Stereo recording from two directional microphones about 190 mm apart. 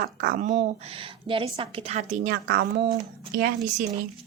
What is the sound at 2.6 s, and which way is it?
A woman's voice, 50° right (ahead or behind).